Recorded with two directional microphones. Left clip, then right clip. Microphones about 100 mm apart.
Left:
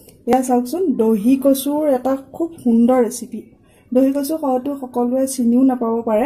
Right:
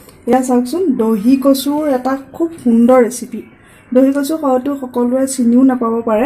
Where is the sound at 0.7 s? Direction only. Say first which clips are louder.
Right 2 dB; 75° left (ahead or behind).